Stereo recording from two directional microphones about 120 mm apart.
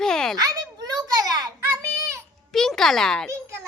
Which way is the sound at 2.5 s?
5° left (ahead or behind).